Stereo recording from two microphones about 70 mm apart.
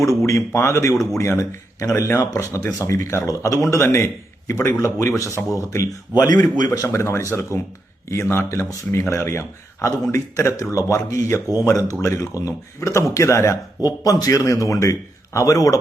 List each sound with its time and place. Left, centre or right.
0.2 s a man's voice: left
3.7 s a man's voice: left
6.1 s a man's voice: left
6.8 s a man's voice: left
8.1 s a man's voice: left
13.8 s a man's voice: left